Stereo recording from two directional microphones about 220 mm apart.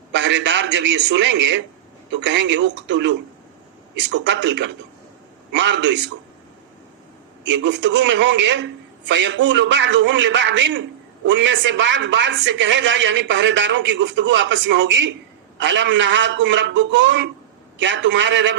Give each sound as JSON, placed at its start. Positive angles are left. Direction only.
{"t": 0.1, "sound": "a man's voice", "side_deg": -55}
{"t": 7.4, "sound": "a man's voice", "side_deg": -55}